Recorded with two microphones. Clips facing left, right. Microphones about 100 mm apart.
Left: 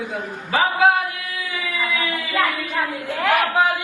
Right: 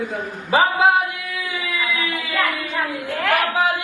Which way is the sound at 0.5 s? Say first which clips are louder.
Right 2 dB; 20° right (ahead or behind).